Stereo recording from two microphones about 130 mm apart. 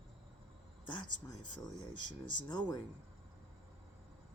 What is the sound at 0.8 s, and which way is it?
Speech, 40° left (ahead or behind).